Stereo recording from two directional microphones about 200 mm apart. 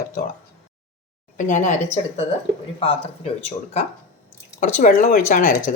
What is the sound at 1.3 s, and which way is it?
Speech, 40° left (ahead or behind).